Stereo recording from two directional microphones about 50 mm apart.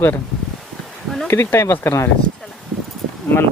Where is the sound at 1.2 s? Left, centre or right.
Left.